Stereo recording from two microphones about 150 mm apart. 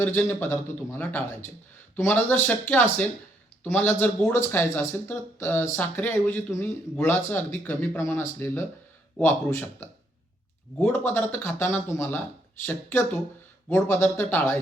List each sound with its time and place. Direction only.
0.0 s speech: 15° left (ahead or behind)
10.8 s speech: 15° left (ahead or behind)